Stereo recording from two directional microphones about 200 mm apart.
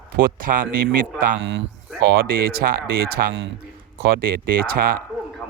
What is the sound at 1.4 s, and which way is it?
Speech, 65° right (ahead or behind).